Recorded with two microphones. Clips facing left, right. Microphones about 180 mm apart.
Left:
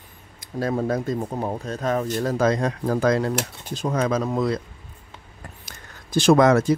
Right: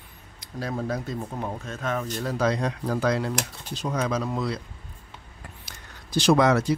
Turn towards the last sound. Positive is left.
turn(degrees=45)  # may be behind; listen again after turning